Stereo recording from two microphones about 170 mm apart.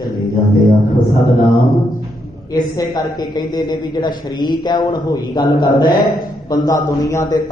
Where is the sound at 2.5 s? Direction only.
25° left (ahead or behind).